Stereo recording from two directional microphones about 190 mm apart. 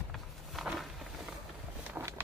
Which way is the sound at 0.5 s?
Centre (ahead or behind).